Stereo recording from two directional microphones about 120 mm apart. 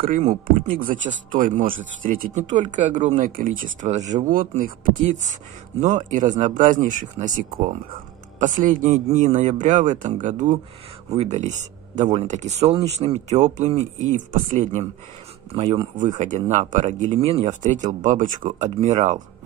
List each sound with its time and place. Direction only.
0.1 s speech: 90° right; by 4.1 s 75° right (ahead or behind)
5.0 s speech: 90° right
11.1 s speech: 65° right (ahead or behind)
15.5 s speech: 50° right (ahead or behind)
16.2 s speech: 85° right